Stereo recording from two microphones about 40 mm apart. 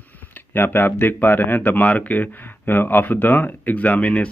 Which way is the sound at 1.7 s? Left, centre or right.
Left.